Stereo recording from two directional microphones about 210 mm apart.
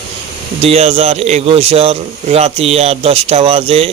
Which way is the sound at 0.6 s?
30° right (ahead or behind).